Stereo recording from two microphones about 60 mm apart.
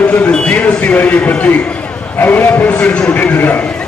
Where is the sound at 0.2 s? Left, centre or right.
Centre.